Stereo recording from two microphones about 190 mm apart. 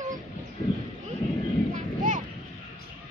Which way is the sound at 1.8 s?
45° right (ahead or behind).